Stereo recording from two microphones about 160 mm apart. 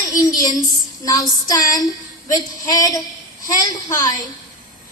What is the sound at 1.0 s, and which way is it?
A woman's voice, 25° left (ahead or behind).